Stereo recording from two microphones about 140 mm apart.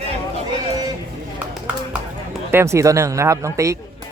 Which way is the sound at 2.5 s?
20° right (ahead or behind).